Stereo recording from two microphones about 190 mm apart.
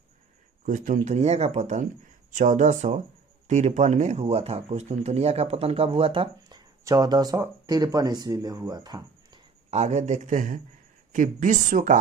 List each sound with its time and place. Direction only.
0.6 s a man's voice: 45° right (ahead or behind); by 9.4 s 20° right (ahead or behind)
9.6 s a man's voice: 35° right (ahead or behind)